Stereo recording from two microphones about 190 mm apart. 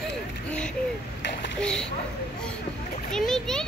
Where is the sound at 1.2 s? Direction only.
70° left (ahead or behind).